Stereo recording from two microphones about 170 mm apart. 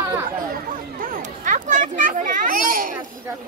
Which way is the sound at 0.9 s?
50° right (ahead or behind).